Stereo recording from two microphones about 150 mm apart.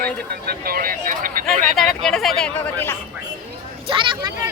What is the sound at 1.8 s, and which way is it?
A woman's voice, centre (ahead or behind).